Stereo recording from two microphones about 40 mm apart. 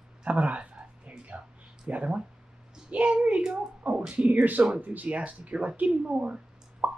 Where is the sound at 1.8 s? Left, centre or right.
Right.